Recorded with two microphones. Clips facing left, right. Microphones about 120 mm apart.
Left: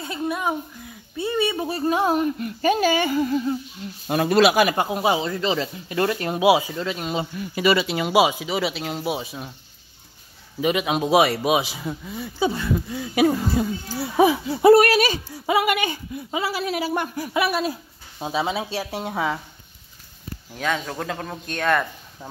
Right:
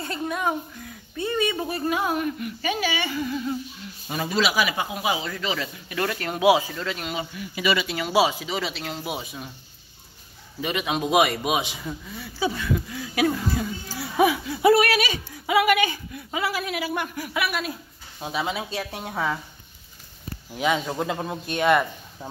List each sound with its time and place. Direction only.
0.0 s a child's voice: 10° left (ahead or behind)
1.7 s speech: 30° left (ahead or behind)
2.6 s speech: 45° left (ahead or behind)
4.1 s speech: 55° left (ahead or behind)
5.0 s speech: 30° left (ahead or behind)
7.5 s speech: 40° left (ahead or behind)
7.8 s speech: 20° left (ahead or behind); by 9.5 s centre (ahead or behind)
10.6 s speech: 10° left (ahead or behind)
12.1 s speech: 20° left (ahead or behind)
18.7 s speech: centre (ahead or behind)
20.5 s a man's voice: 10° right (ahead or behind)